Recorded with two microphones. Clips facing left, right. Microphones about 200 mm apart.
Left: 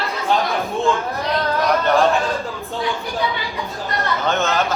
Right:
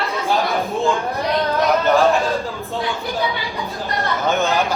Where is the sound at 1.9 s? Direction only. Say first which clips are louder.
Right 1 dB; centre (ahead or behind).